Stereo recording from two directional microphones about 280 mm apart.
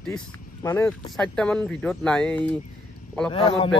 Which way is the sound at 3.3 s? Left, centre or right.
Centre.